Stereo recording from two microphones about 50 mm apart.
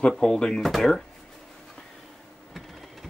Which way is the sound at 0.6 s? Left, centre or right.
Centre.